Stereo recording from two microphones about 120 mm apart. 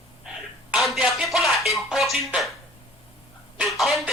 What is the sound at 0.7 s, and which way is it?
Speech, centre (ahead or behind).